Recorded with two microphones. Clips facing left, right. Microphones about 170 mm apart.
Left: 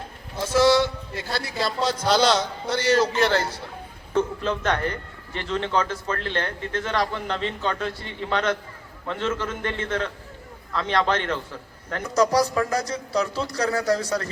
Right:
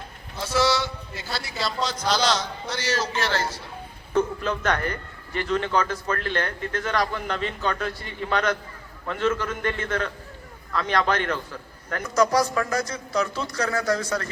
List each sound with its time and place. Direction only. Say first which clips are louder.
0.4 s a man's voice: left 5 dB; 50° left (ahead or behind)
4.2 s a man's voice: even; 25° left (ahead or behind)